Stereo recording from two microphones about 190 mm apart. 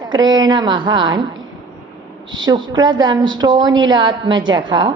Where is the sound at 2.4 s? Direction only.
20° right (ahead or behind).